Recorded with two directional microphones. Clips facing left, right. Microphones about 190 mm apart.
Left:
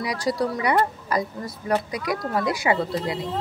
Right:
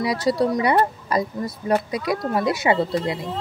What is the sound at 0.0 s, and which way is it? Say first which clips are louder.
A woman's voice: right 4 dB; 25° right (ahead or behind).